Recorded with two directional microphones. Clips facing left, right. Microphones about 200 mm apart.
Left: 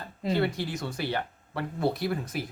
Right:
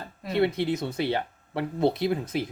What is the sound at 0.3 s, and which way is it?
Speech, 25° right (ahead or behind).